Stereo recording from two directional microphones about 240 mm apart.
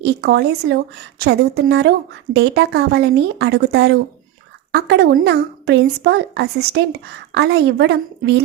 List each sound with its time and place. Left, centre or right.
0.0 s a woman's voice: right